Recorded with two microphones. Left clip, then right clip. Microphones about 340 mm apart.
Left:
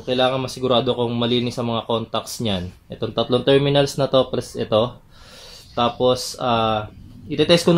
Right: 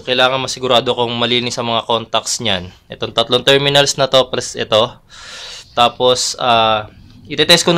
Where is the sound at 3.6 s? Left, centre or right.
Right.